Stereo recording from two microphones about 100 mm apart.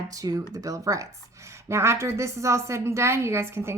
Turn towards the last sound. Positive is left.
turn(degrees=-25)  # may be behind; listen again after turning